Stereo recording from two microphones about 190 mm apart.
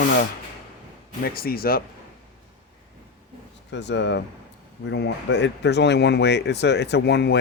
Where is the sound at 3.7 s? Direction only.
70° left (ahead or behind).